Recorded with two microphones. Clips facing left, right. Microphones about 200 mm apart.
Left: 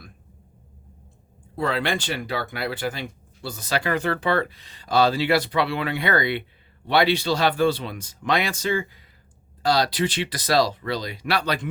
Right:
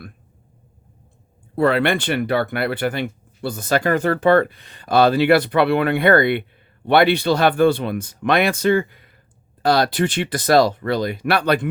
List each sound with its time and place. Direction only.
1.5 s speech: 60° right (ahead or behind)